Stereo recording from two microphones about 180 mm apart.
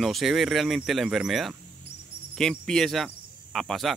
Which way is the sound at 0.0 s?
Centre (ahead or behind).